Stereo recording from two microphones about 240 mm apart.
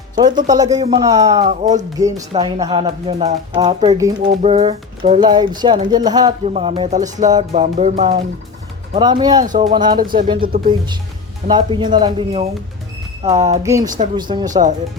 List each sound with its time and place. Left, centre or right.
0.3 s speech: centre
1.4 s speech: right
2.0 s speech: centre
4.4 s speech: right
8.9 s speech: centre
9.4 s speech: right
10.0 s speech: right
10.6 s speech: centre
14.5 s speech: right